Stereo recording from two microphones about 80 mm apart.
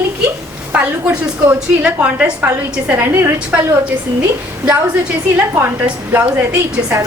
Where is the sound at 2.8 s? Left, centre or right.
Right.